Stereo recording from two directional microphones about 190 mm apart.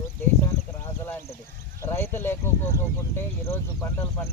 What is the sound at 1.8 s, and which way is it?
Speech, 15° left (ahead or behind).